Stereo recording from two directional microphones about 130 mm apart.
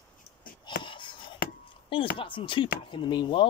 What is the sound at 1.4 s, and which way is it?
Chopping, 90° left.